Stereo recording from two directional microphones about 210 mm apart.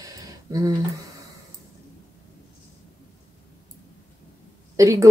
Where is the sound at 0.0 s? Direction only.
15° right (ahead or behind).